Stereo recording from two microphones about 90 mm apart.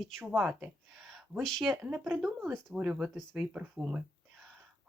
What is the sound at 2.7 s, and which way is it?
Speech, 10° right (ahead or behind).